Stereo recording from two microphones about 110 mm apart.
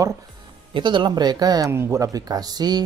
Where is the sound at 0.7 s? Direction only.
45° right (ahead or behind).